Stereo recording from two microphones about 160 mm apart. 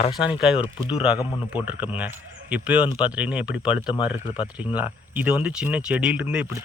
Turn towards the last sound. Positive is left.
turn(degrees=-10)  # may be behind; listen again after turning